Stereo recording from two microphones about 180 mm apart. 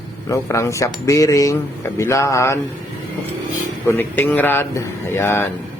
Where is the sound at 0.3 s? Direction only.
15° left (ahead or behind).